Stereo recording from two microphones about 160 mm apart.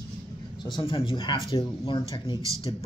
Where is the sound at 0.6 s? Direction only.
30° left (ahead or behind).